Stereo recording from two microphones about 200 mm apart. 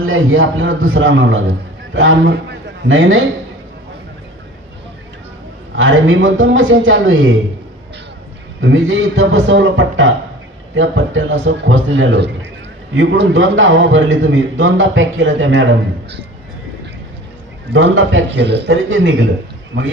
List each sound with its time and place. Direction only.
0.0 s a man's voice: 80° right
5.8 s a man's voice: 75° right (ahead or behind)
8.5 s a man's voice: 70° right (ahead or behind)
17.7 s a man's voice: 65° right (ahead or behind)